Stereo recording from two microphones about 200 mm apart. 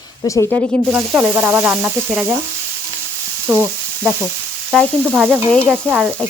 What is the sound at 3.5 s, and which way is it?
Frying, 10° right (ahead or behind).